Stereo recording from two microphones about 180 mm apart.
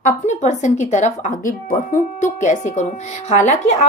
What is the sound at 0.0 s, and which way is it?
Speech, 40° left (ahead or behind).